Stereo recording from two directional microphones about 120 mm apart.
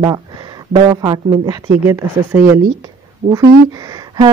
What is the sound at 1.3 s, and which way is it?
Speech, 25° right (ahead or behind).